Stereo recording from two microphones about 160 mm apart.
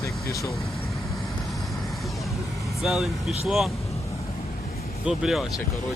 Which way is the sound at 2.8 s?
Centre (ahead or behind).